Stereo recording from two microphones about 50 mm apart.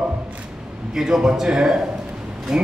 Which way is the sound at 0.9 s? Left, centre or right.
Centre.